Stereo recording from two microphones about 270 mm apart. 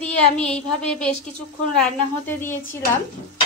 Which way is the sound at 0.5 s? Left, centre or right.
Centre.